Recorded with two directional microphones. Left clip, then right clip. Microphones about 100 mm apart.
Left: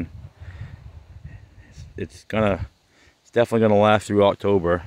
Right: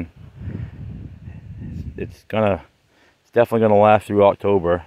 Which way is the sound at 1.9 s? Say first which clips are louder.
Right 2 dB; 10° left (ahead or behind).